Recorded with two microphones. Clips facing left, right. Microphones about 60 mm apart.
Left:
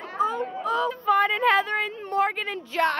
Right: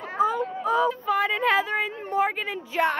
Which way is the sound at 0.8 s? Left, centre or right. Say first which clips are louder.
Left 2 dB; centre.